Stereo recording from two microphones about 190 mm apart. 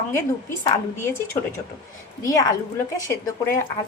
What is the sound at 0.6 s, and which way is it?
Speech, 15° left (ahead or behind).